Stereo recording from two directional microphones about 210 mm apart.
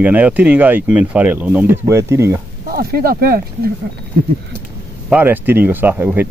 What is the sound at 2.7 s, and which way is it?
Speech, 45° right (ahead or behind).